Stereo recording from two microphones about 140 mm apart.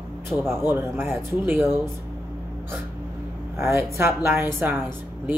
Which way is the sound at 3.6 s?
20° right (ahead or behind).